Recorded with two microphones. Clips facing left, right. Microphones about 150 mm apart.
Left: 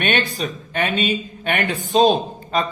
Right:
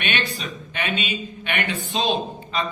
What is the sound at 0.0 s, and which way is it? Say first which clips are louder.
Speech: left 6 dB; 45° left (ahead or behind).